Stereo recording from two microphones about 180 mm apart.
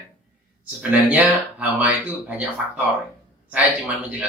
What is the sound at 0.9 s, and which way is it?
Speech, 5° right (ahead or behind).